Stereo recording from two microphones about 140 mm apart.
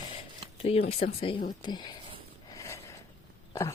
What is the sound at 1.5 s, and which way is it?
Speech, 30° left (ahead or behind).